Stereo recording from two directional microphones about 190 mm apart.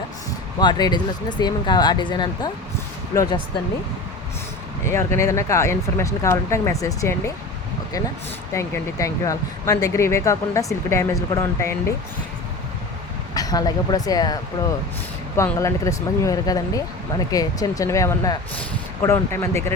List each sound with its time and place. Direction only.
0.6 s speech: 25° left (ahead or behind)
4.9 s speech: 15° left (ahead or behind)
8.5 s speech: 15° left (ahead or behind)
13.3 s speech: 20° left (ahead or behind)
15.4 s speech: 15° left (ahead or behind)